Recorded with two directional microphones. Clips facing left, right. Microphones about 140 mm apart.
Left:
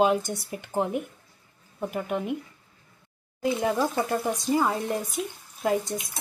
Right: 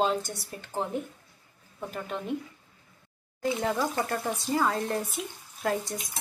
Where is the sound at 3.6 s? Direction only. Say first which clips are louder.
Left 3 dB; 15° left (ahead or behind).